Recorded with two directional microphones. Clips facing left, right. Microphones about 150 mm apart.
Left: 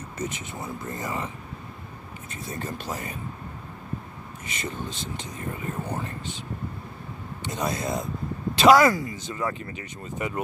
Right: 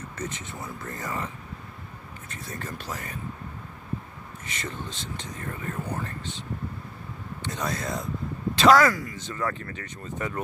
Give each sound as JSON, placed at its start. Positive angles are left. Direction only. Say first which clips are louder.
{"t": 0.2, "sound": "speech", "louder": "left 3 dB", "side_deg": 15}
{"t": 2.3, "sound": "speech", "louder": "left 3 dB", "side_deg": 20}
{"t": 4.6, "sound": "speech", "louder": "left 3 dB", "side_deg": 15}
{"t": 7.4, "sound": "speech", "louder": "left 3 dB", "side_deg": 15}